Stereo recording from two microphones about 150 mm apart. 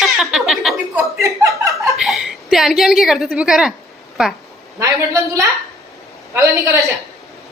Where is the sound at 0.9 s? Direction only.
15° right (ahead or behind).